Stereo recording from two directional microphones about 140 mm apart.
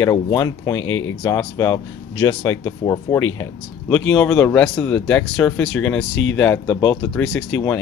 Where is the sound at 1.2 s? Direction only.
15° left (ahead or behind).